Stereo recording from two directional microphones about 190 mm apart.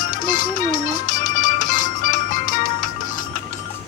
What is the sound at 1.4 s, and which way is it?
Music, 40° left (ahead or behind).